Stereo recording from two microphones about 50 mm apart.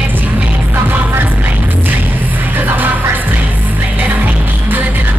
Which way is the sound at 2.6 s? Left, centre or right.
Right.